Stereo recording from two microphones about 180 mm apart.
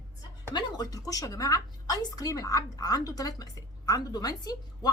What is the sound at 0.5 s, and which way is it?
A woman's voice, 20° left (ahead or behind).